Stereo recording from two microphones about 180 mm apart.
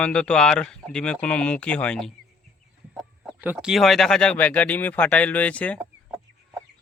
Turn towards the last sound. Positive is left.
turn(degrees=-5)  # may be behind; listen again after turning